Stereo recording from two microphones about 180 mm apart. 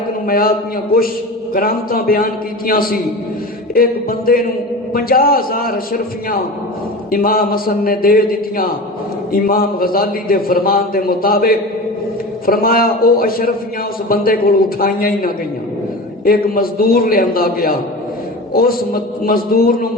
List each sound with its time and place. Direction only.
0.3 s a man's voice: 55° left (ahead or behind)
1.5 s a man's voice: 55° left (ahead or behind)
4.3 s a man's voice: 55° left (ahead or behind)
7.1 s a man's voice: 55° left (ahead or behind)